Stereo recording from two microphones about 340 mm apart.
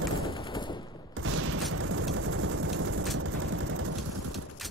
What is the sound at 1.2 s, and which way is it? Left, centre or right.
Fusillade, right.